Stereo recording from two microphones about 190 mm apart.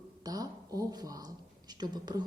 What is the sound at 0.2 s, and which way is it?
A woman's voice, 20° right (ahead or behind).